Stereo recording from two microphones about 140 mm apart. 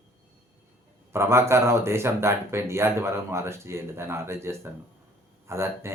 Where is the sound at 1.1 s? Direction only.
20° right (ahead or behind).